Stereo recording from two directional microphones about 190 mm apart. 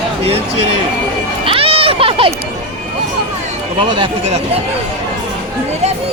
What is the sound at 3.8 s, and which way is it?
Speech, 25° right (ahead or behind).